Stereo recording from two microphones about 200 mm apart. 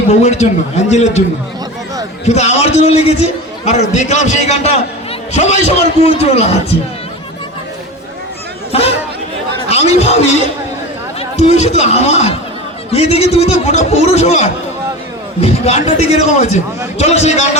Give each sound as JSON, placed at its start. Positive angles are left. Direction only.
{"t": 0.1, "sound": "speech", "side_deg": 35}
{"t": 2.2, "sound": "speech", "side_deg": 35}
{"t": 9.6, "sound": "speech", "side_deg": 30}